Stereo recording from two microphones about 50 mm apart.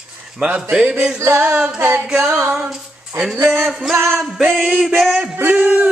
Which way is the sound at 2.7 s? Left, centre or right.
Centre.